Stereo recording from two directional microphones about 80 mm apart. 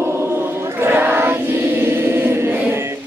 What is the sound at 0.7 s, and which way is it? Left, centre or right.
Choir, right.